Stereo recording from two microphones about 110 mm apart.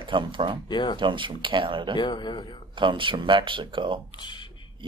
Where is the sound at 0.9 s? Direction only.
50° right (ahead or behind).